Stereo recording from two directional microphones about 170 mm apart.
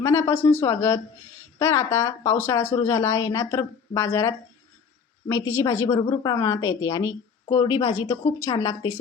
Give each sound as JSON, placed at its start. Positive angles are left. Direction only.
{"t": 0.0, "sound": "speech", "side_deg": 15}